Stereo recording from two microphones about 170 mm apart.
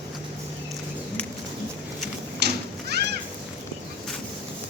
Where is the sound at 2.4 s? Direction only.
75° right (ahead or behind).